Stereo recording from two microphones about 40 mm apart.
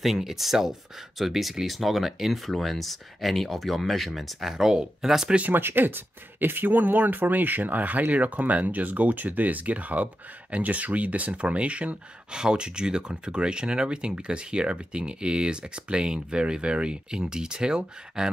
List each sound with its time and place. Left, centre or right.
0.0 s speech: centre
5.5 s speech: right
12.4 s speech: right